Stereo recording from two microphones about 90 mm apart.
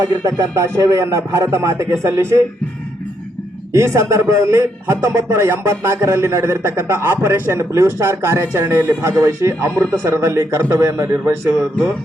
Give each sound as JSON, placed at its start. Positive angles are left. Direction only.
{"t": 0.0, "sound": "a man's voice", "side_deg": -50}
{"t": 3.7, "sound": "a man's voice", "side_deg": -35}
{"t": 8.9, "sound": "a man's voice", "side_deg": -40}
{"t": 11.5, "sound": "speech", "side_deg": 5}